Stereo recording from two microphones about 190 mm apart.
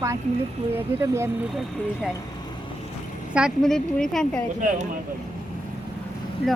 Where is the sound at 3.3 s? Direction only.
Centre (ahead or behind).